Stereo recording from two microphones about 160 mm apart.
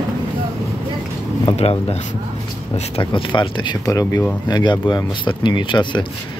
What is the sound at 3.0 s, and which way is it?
Speech, 30° left (ahead or behind).